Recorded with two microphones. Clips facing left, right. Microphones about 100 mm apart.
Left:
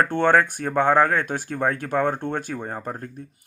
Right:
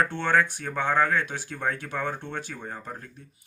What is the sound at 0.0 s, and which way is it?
Speech, 50° left (ahead or behind).